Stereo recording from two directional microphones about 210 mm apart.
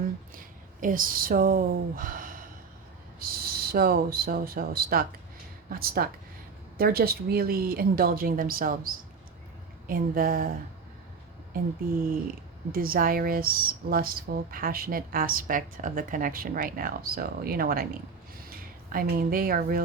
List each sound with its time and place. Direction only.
0.3 s speech: 40° right (ahead or behind)
11.8 s speech: 45° right (ahead or behind)
18.3 s a sound: 45° right (ahead or behind)